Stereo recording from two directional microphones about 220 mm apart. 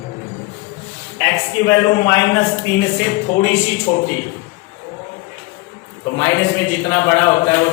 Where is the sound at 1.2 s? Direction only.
10° left (ahead or behind).